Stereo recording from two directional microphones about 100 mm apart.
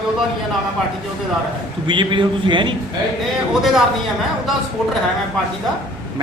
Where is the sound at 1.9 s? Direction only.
55° right (ahead or behind).